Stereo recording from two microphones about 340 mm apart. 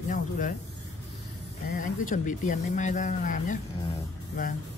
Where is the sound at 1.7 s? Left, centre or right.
Left.